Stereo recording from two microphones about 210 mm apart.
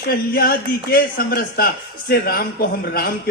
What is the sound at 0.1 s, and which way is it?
A man's voice, 45° left (ahead or behind).